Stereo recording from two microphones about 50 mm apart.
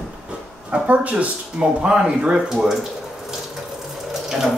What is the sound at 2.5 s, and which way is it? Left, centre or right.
Speech, centre.